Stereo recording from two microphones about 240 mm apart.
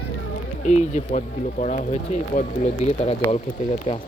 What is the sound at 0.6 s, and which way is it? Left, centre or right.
Speech, left.